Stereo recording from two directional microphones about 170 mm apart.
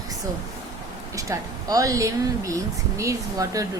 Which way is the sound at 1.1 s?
20° right (ahead or behind).